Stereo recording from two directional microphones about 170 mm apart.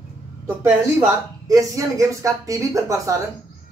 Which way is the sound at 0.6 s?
15° right (ahead or behind).